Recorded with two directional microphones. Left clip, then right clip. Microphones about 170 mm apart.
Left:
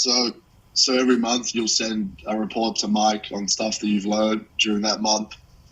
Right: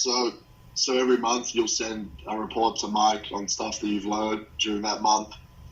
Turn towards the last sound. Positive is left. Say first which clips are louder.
# even
turn(degrees=75)  # may be behind; listen again after turning